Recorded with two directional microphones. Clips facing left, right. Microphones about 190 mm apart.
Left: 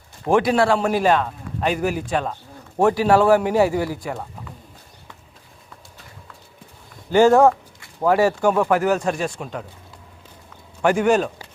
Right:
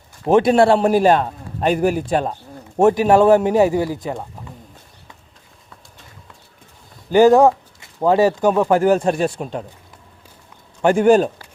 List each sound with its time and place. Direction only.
0.3 s a man's voice: 25° right (ahead or behind)
2.7 s speech: 20° right (ahead or behind)
7.1 s speech: 15° right (ahead or behind)
8.8 s a man's voice: 30° right (ahead or behind)
10.8 s a man's voice: 35° right (ahead or behind)